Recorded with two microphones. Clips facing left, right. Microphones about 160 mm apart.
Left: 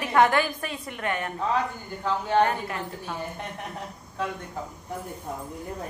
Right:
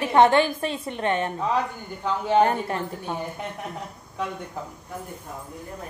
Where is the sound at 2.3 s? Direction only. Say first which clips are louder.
Right 3 dB; 25° right (ahead or behind).